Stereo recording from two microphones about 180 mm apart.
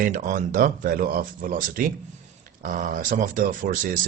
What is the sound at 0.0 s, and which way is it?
Speech, 50° right (ahead or behind).